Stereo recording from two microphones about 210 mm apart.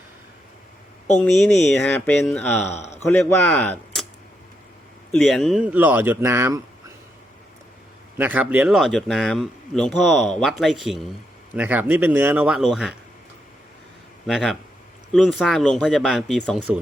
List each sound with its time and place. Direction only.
1.2 s speech: centre (ahead or behind)
2.6 s speech: 30° left (ahead or behind)
3.1 s speech: 5° left (ahead or behind)
5.1 s speech: centre (ahead or behind)
8.2 s speech: 10° right (ahead or behind)
14.3 s speech: centre (ahead or behind)